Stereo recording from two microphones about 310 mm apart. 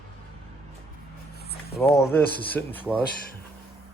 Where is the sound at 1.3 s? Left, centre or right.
Left.